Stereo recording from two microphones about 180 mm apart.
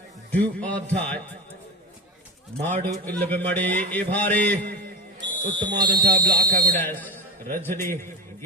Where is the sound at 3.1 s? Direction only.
10° left (ahead or behind).